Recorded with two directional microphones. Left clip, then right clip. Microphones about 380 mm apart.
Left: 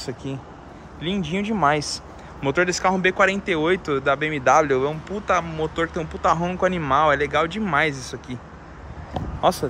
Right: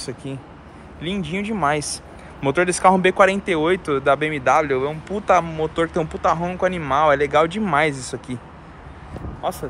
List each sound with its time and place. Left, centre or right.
1.0 s speech: centre
9.4 s speech: centre